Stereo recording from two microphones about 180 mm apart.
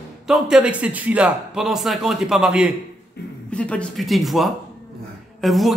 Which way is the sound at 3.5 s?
5° left (ahead or behind).